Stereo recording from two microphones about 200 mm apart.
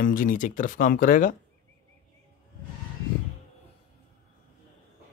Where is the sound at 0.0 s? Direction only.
45° left (ahead or behind).